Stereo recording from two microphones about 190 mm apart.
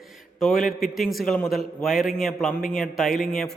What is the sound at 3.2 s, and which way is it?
Speech, 45° left (ahead or behind).